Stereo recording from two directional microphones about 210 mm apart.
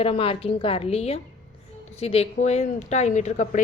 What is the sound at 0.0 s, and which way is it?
A woman's voice, 25° left (ahead or behind).